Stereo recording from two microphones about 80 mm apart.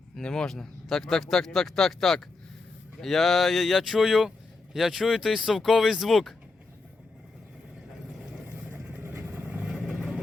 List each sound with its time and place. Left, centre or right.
0.2 s speech: centre
8.7 s vehicle: right
9.6 s vehicle: centre